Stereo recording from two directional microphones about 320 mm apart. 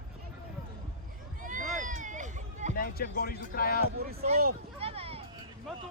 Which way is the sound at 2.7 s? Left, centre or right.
Left.